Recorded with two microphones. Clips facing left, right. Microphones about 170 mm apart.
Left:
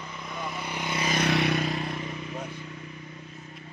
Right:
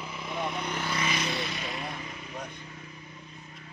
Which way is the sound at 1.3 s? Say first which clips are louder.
Left 9 dB; 70° left (ahead or behind).